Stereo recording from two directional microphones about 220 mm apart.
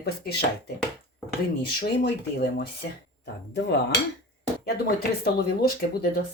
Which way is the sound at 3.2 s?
50° left (ahead or behind).